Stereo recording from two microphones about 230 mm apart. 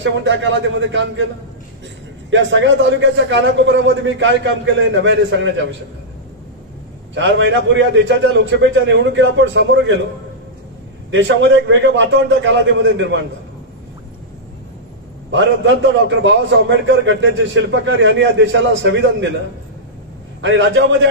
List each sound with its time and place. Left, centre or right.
0.0 s a man's voice: right
2.3 s a man's voice: right
7.2 s a man's voice: right
11.1 s a man's voice: right
15.3 s a man's voice: right
20.4 s a man's voice: right